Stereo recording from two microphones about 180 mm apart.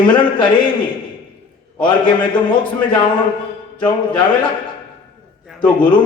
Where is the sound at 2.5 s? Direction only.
25° left (ahead or behind).